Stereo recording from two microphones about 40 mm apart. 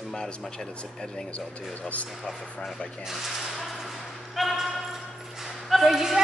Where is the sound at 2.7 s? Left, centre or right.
Left.